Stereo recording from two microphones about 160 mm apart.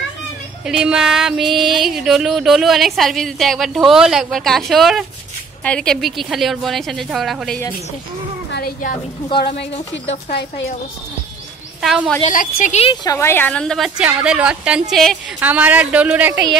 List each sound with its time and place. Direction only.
0.7 s music: 5° right (ahead or behind)
8.5 s speech: 75° left (ahead or behind)
11.8 s music: centre (ahead or behind)
12.2 s a woman's voice: 55° left (ahead or behind)
13.0 s music: 20° left (ahead or behind); by 15.1 s centre (ahead or behind)
15.4 s speech: 10° right (ahead or behind)